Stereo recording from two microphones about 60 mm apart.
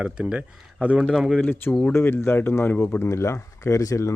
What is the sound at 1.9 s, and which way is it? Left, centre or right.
Speech, left.